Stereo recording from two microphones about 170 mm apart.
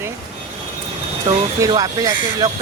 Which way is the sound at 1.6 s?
20° right (ahead or behind).